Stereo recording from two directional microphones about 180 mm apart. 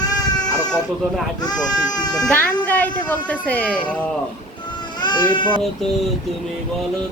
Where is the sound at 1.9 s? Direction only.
20° left (ahead or behind).